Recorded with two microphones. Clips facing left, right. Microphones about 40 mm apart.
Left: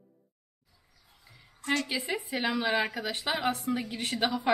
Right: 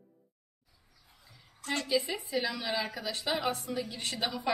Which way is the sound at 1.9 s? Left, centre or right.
Left.